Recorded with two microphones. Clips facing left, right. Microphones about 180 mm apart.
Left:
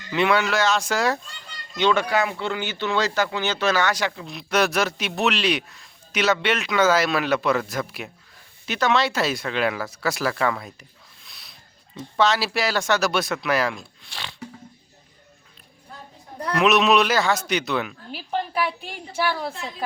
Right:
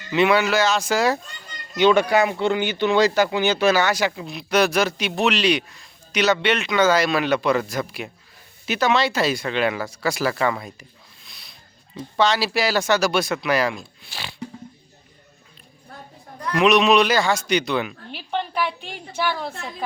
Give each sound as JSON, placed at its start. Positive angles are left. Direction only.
{"t": 0.1, "sound": "speech", "side_deg": -5}
{"t": 1.7, "sound": "speech", "side_deg": -15}
{"t": 11.3, "sound": "a sound", "side_deg": 0}
{"t": 11.9, "sound": "speech", "side_deg": 0}
{"t": 16.6, "sound": "speech", "side_deg": 0}